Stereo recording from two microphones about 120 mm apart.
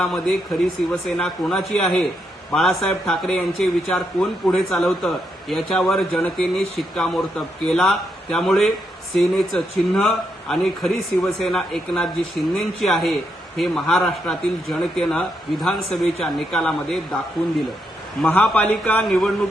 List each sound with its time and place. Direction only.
0.0 s a man's voice: 5° left (ahead or behind)
19.0 s speech: centre (ahead or behind)